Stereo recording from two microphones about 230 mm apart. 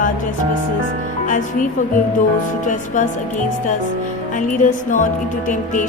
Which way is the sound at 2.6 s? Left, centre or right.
Left.